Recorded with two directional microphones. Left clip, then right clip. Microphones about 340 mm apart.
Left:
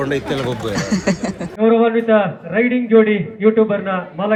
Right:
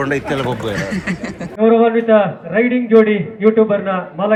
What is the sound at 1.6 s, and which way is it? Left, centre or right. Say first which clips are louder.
A man's voice: right 2 dB; centre.